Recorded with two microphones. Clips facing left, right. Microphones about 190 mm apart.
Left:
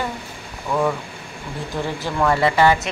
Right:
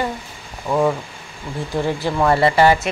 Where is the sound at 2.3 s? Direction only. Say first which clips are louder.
Right 2 dB; 40° right (ahead or behind).